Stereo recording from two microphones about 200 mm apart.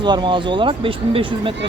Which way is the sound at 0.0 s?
20° right (ahead or behind).